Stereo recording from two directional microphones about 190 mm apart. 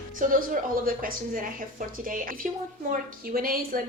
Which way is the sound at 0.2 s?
45° right (ahead or behind).